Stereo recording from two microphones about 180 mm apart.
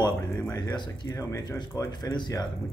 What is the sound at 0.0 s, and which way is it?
Speech, 20° left (ahead or behind).